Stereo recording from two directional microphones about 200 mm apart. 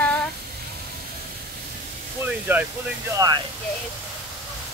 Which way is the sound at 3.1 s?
20° right (ahead or behind).